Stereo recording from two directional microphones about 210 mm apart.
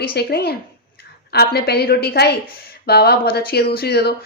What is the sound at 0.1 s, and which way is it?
Speech, 50° left (ahead or behind).